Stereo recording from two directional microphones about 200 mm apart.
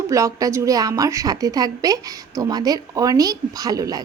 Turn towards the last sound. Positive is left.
turn(degrees=-20)  # may be behind; listen again after turning